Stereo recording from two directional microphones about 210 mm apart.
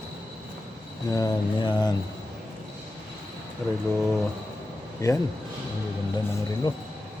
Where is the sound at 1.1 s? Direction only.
15° left (ahead or behind).